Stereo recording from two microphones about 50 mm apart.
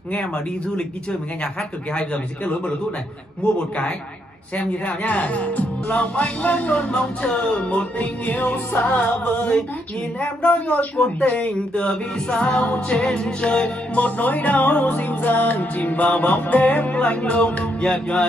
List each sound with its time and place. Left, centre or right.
0.2 s speech: centre
3.5 s speech: left
7.0 s speech: centre
7.3 s speech: left
8.8 s music: left
10.2 s speech: left